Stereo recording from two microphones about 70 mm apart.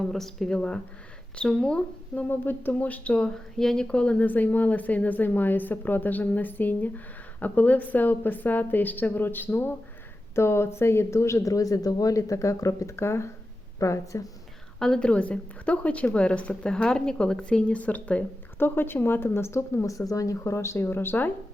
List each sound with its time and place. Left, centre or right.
0.0 s a woman's voice: centre
2.1 s a woman's voice: left
14.8 s a woman's voice: centre
18.6 s speech: left
20.8 s speech: left